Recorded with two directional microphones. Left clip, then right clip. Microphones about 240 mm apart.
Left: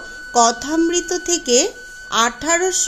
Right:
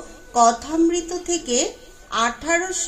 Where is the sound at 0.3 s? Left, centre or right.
Left.